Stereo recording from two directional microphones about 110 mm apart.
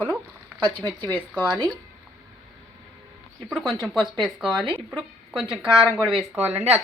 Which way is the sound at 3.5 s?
5° right (ahead or behind).